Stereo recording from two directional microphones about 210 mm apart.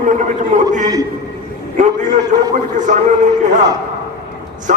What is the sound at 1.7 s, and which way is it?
A man's voice, 35° right (ahead or behind).